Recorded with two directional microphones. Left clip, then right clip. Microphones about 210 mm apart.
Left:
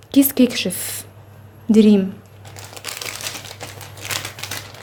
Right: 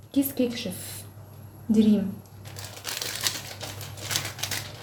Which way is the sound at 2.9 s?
15° left (ahead or behind).